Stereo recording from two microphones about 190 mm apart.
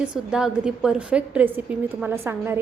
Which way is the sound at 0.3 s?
5° right (ahead or behind).